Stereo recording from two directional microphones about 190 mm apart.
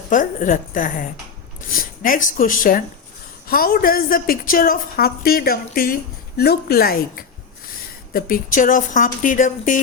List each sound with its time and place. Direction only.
0.1 s a woman's voice: 45° left (ahead or behind)